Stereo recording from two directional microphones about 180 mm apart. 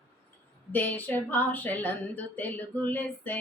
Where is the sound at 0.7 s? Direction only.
10° left (ahead or behind).